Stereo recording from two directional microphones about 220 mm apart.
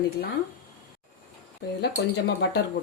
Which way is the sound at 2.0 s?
50° left (ahead or behind).